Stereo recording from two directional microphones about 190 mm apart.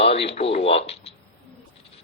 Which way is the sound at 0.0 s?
30° left (ahead or behind).